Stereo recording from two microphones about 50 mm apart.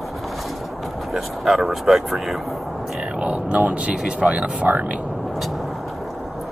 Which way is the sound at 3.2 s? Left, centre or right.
Right.